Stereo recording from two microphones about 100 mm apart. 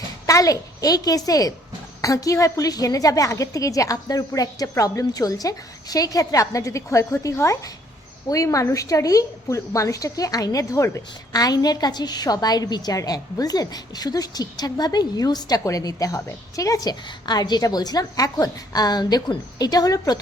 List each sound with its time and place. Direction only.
0.3 s a woman's voice: 35° left (ahead or behind)